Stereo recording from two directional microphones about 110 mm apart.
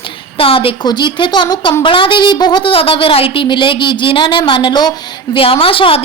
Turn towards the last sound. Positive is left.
turn(degrees=55)  # may be behind; listen again after turning